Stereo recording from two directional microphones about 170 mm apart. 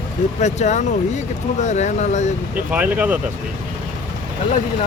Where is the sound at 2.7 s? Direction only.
10° right (ahead or behind).